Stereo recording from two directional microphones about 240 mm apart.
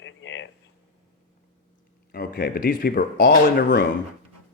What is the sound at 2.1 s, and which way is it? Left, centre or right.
Speech, left.